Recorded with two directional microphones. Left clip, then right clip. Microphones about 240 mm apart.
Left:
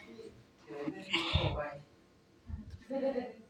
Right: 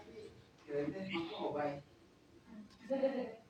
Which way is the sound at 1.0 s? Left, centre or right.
Left.